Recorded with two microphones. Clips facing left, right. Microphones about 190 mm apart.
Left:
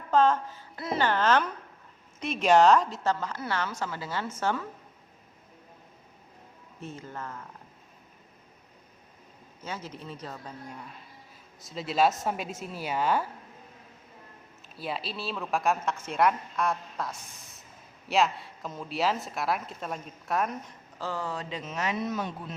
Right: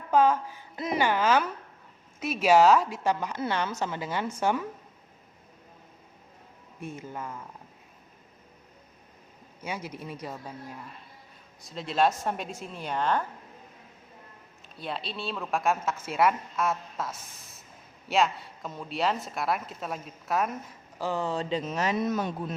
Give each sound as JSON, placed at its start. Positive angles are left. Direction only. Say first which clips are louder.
{"t": 0.1, "sound": "a woman's voice", "louder": "right 1 dB", "side_deg": -10}
{"t": 6.7, "sound": "a woman's voice", "louder": "right 2 dB", "side_deg": -10}
{"t": 9.6, "sound": "a woman's voice", "louder": "right 2 dB", "side_deg": -10}
{"t": 14.8, "sound": "a woman's voice", "louder": "even", "side_deg": 5}
{"t": 21.0, "sound": "speech", "louder": "right 4 dB", "side_deg": -20}